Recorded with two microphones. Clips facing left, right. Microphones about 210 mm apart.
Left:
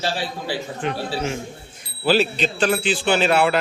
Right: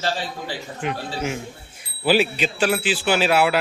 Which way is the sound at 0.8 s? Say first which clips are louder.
Even; 10° right (ahead or behind).